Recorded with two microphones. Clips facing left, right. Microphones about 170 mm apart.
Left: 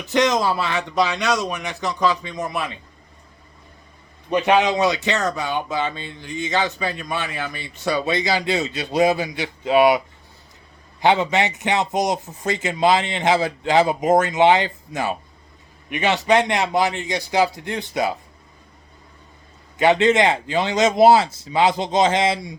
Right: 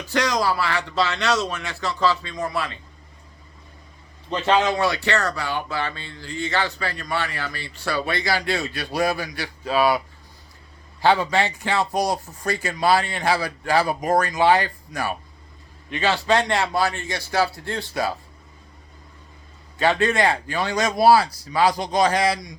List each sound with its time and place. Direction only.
0.0 s speech: 20° left (ahead or behind)
4.3 s speech: 15° left (ahead or behind)
11.0 s a man's voice: 20° left (ahead or behind)
19.8 s speech: 20° left (ahead or behind)